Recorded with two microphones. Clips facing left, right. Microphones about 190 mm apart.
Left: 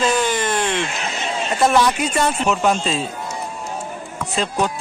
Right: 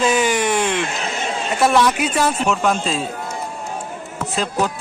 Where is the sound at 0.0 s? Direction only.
10° right (ahead or behind).